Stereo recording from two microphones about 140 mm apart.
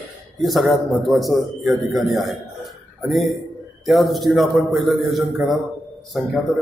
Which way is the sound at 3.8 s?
Centre (ahead or behind).